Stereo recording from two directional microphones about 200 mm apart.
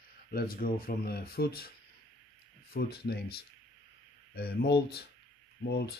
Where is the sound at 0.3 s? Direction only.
45° left (ahead or behind).